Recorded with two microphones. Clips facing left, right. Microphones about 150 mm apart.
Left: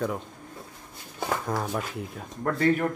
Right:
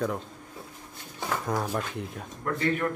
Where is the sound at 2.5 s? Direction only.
35° left (ahead or behind).